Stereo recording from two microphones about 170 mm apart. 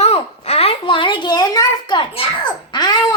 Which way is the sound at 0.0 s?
35° left (ahead or behind).